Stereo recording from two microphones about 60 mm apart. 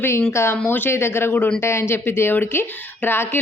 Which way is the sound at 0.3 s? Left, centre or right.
Left.